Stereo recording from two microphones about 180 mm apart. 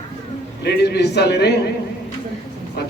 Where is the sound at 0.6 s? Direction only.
65° left (ahead or behind).